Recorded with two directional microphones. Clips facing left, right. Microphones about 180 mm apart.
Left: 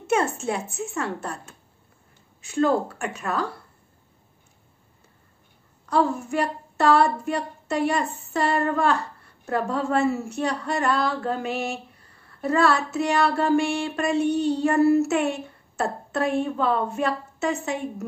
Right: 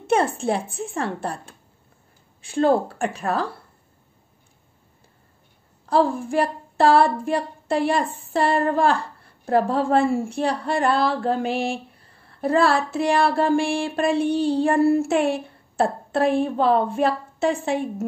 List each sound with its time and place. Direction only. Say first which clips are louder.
0.0 s speech: right 3 dB; 30° right (ahead or behind)
5.9 s speech: right 3 dB; 30° right (ahead or behind)